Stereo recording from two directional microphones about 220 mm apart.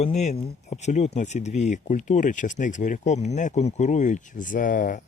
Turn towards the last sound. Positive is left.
turn(degrees=35)  # may be behind; listen again after turning